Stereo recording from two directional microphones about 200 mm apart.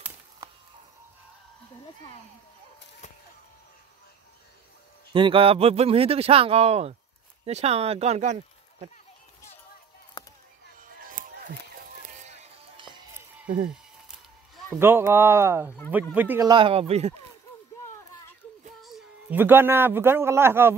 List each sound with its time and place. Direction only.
5.1 s speech: 25° right (ahead or behind)
10.2 s a sound: 20° left (ahead or behind)
11.0 s music: 45° right (ahead or behind)
14.8 s speech: 10° right (ahead or behind)
16.4 s speech: 25° right (ahead or behind)
18.8 s speech: centre (ahead or behind)